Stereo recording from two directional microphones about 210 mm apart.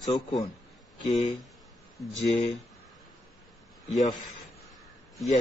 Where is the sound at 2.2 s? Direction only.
30° left (ahead or behind).